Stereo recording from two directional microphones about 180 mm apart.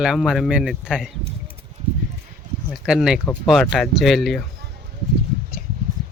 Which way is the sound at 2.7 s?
5° right (ahead or behind).